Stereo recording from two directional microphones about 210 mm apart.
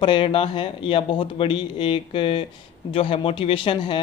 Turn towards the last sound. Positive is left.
turn(degrees=20)  # may be behind; listen again after turning